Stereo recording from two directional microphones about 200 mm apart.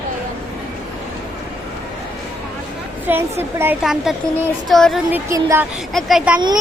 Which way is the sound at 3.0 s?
10° right (ahead or behind).